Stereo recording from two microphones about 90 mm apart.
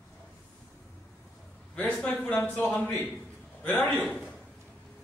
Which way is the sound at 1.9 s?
10° left (ahead or behind).